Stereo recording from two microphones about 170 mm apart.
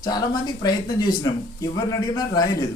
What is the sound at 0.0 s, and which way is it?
Speech, 25° left (ahead or behind).